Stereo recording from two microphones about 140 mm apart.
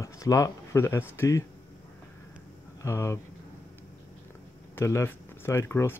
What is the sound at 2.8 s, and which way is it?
Speech, 20° left (ahead or behind).